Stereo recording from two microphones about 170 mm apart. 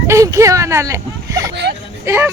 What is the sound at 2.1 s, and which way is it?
Speech, 15° right (ahead or behind).